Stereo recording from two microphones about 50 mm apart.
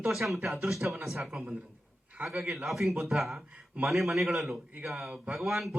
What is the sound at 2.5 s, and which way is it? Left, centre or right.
Speech, centre.